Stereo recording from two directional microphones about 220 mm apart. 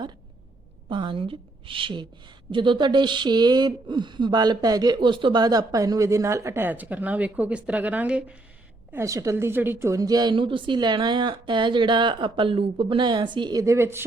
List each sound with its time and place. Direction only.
0.9 s a woman's voice: 20° right (ahead or behind)